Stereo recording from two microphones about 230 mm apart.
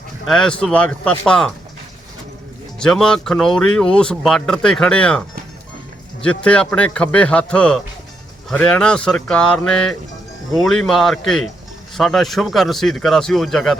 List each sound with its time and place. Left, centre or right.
0.3 s speech: centre
2.7 s speech: centre
6.2 s speech: centre